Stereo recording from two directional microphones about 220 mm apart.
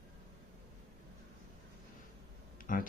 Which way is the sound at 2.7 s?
35° left (ahead or behind).